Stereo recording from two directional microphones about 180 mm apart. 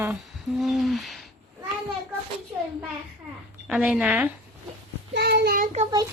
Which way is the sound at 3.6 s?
5° right (ahead or behind).